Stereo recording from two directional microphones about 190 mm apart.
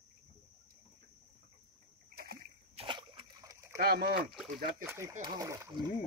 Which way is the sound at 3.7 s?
55° right (ahead or behind).